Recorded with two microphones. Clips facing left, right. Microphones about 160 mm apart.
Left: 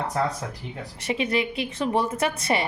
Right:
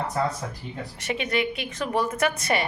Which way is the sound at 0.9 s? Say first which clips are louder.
Left 2 dB; 30° left (ahead or behind).